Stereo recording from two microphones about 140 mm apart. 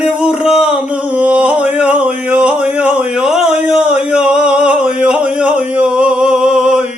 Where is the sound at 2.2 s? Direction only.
10° right (ahead or behind).